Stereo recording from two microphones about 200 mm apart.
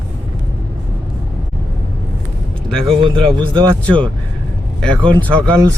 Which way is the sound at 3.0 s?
25° right (ahead or behind).